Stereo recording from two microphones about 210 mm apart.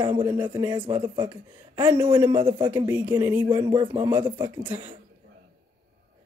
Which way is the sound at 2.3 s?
25° right (ahead or behind).